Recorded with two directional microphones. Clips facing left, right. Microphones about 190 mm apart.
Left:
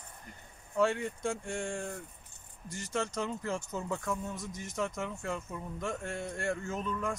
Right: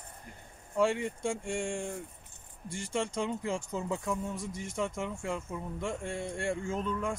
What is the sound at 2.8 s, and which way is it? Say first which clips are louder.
Speech: right 2 dB; 10° right (ahead or behind).